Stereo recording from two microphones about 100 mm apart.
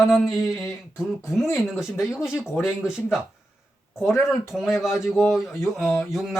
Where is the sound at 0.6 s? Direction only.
25° left (ahead or behind).